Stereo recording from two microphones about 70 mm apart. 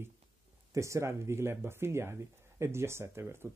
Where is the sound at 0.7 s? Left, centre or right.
Right.